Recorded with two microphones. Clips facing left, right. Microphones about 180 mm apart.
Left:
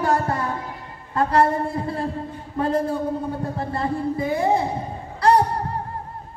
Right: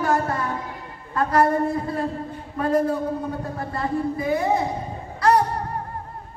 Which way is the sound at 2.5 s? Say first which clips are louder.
Right 1 dB; 25° left (ahead or behind).